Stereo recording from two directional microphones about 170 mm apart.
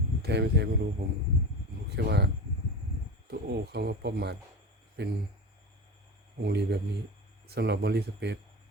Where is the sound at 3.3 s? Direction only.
75° right (ahead or behind).